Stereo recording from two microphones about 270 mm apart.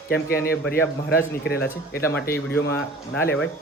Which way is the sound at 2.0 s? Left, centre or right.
Centre.